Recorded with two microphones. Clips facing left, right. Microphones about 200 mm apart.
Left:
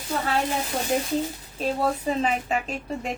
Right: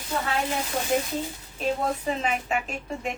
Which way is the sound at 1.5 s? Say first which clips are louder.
Left 1 dB; 35° left (ahead or behind).